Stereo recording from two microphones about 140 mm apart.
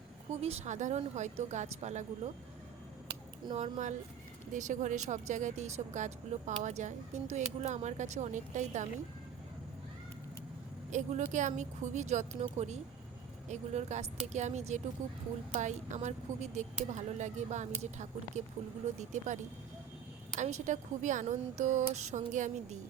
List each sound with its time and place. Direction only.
0.4 s speech: 50° right (ahead or behind)
3.5 s speech: 55° right (ahead or behind)
10.9 s speech: 55° right (ahead or behind)